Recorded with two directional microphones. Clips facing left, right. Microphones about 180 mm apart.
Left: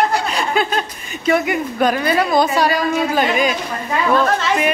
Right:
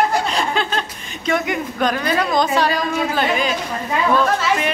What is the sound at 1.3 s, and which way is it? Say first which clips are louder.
A woman's voice: left 4 dB; 5° left (ahead or behind).